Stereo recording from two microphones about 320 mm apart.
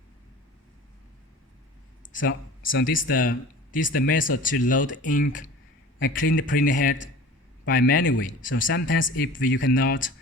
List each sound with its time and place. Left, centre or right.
2.1 s speech: left
3.1 s a man's voice: left